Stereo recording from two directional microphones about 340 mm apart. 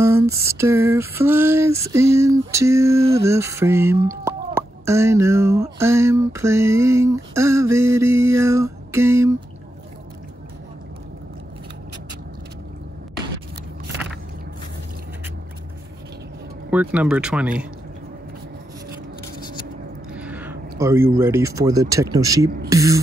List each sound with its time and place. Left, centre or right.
0.0 s female singing: centre
16.7 s speech: centre
20.2 s speech: centre